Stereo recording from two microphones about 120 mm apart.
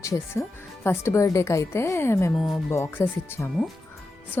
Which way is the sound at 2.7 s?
20° left (ahead or behind).